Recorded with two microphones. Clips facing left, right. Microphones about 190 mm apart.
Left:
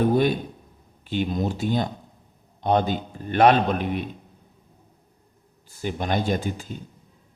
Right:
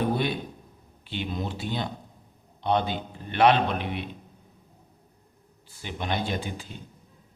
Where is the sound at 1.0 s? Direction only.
45° left (ahead or behind).